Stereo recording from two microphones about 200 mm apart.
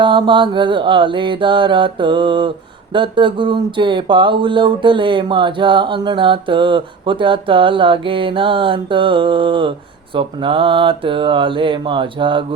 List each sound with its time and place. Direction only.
0.0 s speech: 25° right (ahead or behind)